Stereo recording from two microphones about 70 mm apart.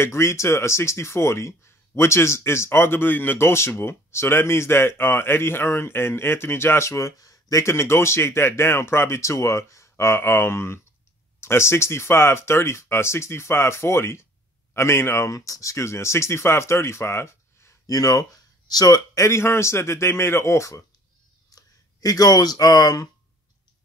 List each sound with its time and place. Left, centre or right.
0.0 s speech: left
17.8 s speech: left
19.1 s speech: left
21.5 s speech: left